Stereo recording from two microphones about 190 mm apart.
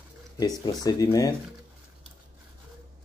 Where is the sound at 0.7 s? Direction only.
20° left (ahead or behind).